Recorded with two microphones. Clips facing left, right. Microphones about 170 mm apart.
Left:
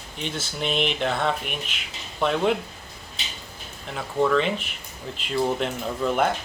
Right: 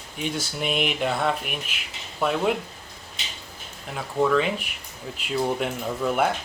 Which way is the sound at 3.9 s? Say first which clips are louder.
Even; 5° right (ahead or behind).